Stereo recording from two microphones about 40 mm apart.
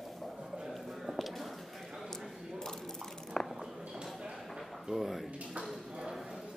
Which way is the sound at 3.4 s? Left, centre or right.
Centre.